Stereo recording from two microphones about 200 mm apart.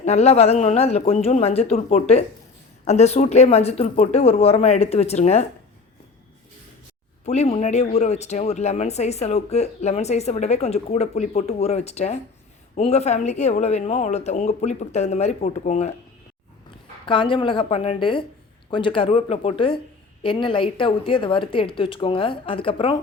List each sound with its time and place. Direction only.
0.0 s speech: 35° left (ahead or behind)
7.3 s speech: 30° left (ahead or behind)
17.1 s speech: 25° left (ahead or behind)